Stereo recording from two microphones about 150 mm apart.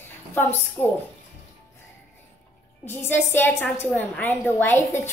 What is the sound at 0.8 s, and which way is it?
Speech, 30° left (ahead or behind).